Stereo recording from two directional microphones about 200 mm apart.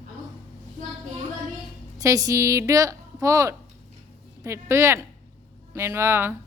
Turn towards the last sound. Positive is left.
turn(degrees=-10)  # may be behind; listen again after turning